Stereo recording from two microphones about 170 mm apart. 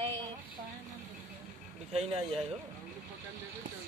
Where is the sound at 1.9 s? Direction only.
35° right (ahead or behind).